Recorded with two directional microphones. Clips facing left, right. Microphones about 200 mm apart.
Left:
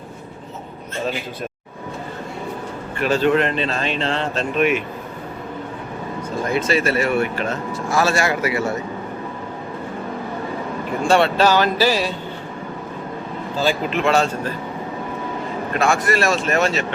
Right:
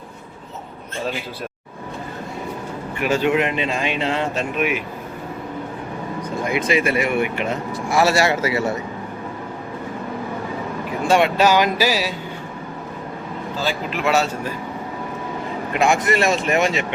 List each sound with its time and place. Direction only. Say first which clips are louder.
3.0 s speech: left 2 dB; 10° right (ahead or behind)
6.4 s speech: even; 15° right (ahead or behind)
11.1 s speech: even; 10° right (ahead or behind)
13.9 s speech: right 2 dB; 5° right (ahead or behind)
15.7 s speech: right 1 dB; 15° right (ahead or behind)